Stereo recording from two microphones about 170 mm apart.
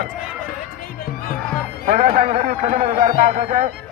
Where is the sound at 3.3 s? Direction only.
45° right (ahead or behind).